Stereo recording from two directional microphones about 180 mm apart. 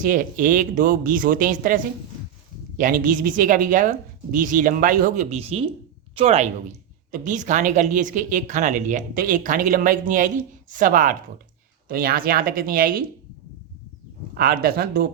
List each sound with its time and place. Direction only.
0.0 s speech: 50° right (ahead or behind)
14.3 s speech: 55° right (ahead or behind)